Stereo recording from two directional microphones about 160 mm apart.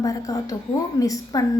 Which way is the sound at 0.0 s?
20° left (ahead or behind).